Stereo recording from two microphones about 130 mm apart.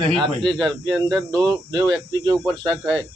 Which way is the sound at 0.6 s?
35° right (ahead or behind).